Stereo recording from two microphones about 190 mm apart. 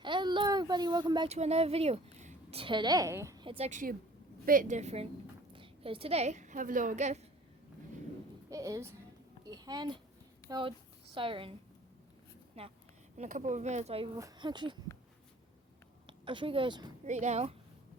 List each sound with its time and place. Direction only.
0.0 s speech: 25° right (ahead or behind)
1.3 s a woman's voice: 35° right (ahead or behind); by 3.4 s 15° right (ahead or behind)
3.4 s a woman's voice: 30° right (ahead or behind)
8.4 s a woman's voice: 15° right (ahead or behind)
9.5 s a sound: 20° right (ahead or behind)
10.5 s speech: 25° right (ahead or behind)
12.6 s a woman's voice: 30° right (ahead or behind)
14.2 s speech: 20° right (ahead or behind)
16.0 s a woman's voice: 25° right (ahead or behind)
17.1 s a woman's voice: 40° right (ahead or behind)